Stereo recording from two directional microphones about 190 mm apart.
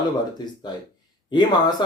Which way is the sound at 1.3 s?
20° left (ahead or behind).